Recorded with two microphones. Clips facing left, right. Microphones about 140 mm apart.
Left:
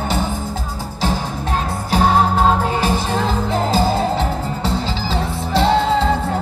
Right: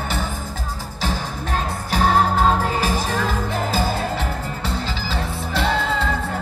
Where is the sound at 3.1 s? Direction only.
30° left (ahead or behind).